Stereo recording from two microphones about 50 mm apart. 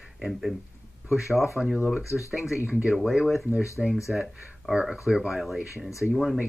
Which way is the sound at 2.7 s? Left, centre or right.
Right.